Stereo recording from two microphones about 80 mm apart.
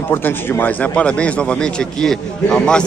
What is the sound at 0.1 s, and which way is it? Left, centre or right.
A man's voice, left.